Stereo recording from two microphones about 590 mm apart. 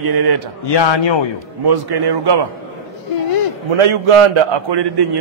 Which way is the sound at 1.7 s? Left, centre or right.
Right.